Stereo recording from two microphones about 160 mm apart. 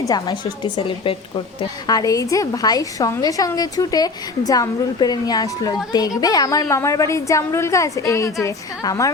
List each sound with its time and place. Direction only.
0.1 s a woman's voice: 25° left (ahead or behind)
0.8 s a woman's voice: 35° left (ahead or behind)
1.9 s a woman's voice: 20° left (ahead or behind)